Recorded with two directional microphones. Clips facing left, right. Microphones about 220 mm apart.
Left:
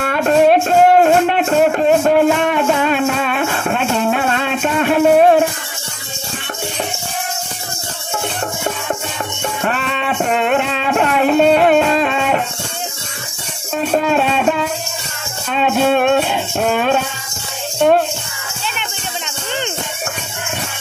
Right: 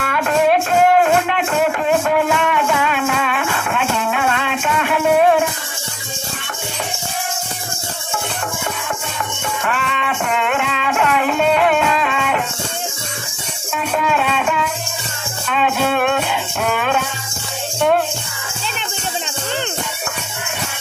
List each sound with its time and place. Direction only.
0.0 s music: 35° left (ahead or behind)
9.6 s music: 35° left (ahead or behind)
13.7 s music: 35° left (ahead or behind)